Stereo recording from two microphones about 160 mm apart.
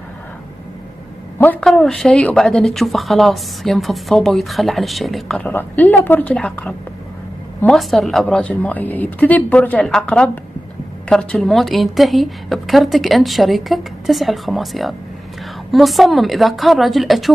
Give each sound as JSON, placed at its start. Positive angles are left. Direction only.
{"t": 1.4, "sound": "a woman's voice", "side_deg": 5}